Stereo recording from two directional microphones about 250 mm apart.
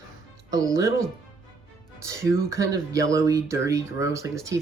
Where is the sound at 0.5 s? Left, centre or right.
Centre.